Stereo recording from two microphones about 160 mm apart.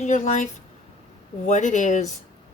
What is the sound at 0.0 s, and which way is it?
Speech, 45° left (ahead or behind).